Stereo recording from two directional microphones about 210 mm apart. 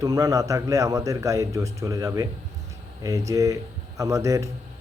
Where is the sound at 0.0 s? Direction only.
15° right (ahead or behind).